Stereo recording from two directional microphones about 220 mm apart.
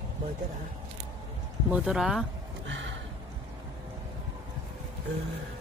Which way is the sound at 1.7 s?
Centre (ahead or behind).